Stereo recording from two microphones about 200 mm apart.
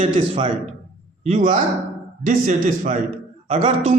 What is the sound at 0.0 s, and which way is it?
A man's voice, 30° right (ahead or behind).